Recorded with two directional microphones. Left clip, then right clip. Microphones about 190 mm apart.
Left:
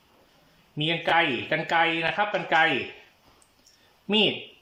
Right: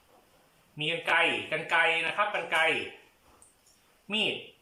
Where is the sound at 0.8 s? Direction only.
40° left (ahead or behind).